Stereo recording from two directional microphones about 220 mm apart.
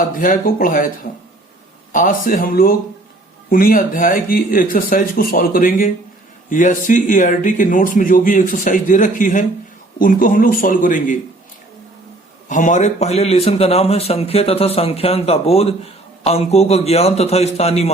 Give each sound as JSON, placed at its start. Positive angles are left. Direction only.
{"t": 0.0, "sound": "speech", "side_deg": 40}
{"t": 1.9, "sound": "speech", "side_deg": 35}
{"t": 12.5, "sound": "a man's voice", "side_deg": 35}